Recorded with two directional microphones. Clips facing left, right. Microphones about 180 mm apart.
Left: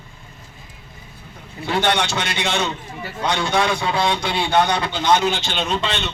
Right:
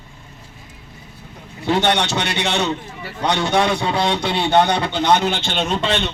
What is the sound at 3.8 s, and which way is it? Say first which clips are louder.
Speech: right 1 dB; 20° right (ahead or behind).